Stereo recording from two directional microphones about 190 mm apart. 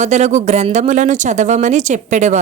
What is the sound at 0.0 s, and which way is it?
Speech, 35° right (ahead or behind).